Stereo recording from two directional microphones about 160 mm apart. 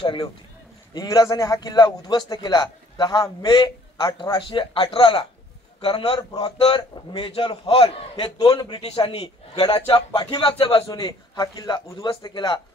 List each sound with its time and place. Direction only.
0.0 s a man's voice: 30° left (ahead or behind)
8.8 s a man's voice: 40° left (ahead or behind)